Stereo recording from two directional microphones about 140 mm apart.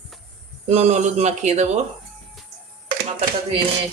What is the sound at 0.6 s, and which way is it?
Speech, 50° right (ahead or behind).